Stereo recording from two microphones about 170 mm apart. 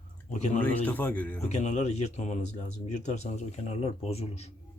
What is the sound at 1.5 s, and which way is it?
Speech, 40° left (ahead or behind).